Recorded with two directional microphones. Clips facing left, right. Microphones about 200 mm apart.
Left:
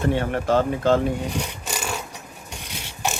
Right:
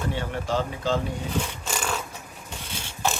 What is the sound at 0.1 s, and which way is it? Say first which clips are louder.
Speech: left 8 dB; 55° left (ahead or behind).